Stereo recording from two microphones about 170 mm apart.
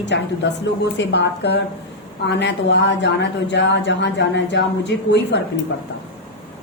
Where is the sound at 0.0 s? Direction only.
90° left.